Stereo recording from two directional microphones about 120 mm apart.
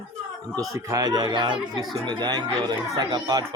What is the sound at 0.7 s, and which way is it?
Speech, 25° right (ahead or behind).